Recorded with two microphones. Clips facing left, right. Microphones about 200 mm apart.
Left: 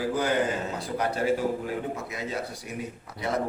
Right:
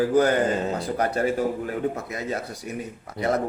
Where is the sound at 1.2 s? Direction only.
50° right (ahead or behind).